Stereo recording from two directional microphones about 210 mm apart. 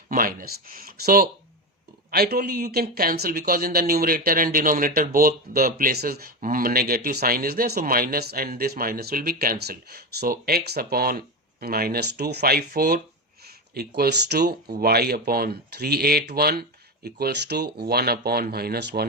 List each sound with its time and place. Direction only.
0.1 s speech: 40° right (ahead or behind)